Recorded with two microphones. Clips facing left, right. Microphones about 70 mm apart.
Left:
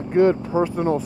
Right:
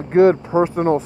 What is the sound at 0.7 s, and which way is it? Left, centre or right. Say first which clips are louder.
Speech: right 4 dB; right.